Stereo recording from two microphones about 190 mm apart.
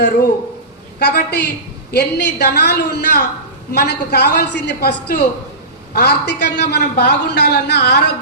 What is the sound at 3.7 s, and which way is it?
A woman's voice, 60° left (ahead or behind).